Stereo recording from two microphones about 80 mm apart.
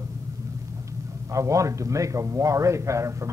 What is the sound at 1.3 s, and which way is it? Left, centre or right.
A man's voice, right.